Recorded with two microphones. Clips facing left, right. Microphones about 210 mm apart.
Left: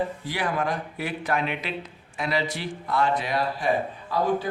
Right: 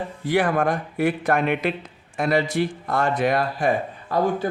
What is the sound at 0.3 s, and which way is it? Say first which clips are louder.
Speech: right 11 dB; 50° right (ahead or behind).